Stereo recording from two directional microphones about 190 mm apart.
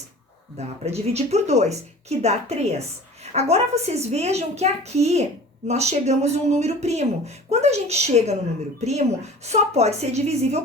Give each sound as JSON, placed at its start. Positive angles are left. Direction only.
{"t": 0.5, "sound": "speech", "side_deg": -35}